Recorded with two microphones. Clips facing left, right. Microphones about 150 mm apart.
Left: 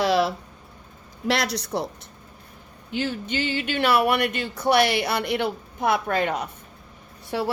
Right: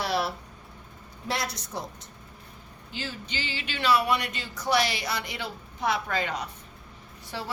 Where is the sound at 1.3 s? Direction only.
80° left.